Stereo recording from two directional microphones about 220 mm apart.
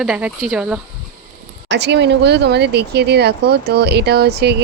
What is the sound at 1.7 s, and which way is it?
Speech, 50° right (ahead or behind).